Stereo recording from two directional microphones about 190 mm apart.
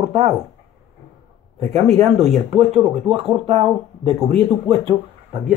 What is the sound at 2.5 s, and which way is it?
Speech, 35° right (ahead or behind).